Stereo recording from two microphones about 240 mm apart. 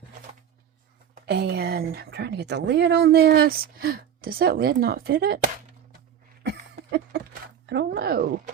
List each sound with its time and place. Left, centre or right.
1.1 s speech: right
7.1 s a sound: right
7.7 s speech: right